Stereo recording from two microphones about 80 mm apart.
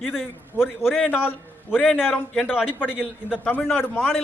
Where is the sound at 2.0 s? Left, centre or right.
Centre.